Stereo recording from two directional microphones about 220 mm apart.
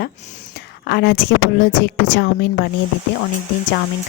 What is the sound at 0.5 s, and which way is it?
A woman's voice, 50° left (ahead or behind).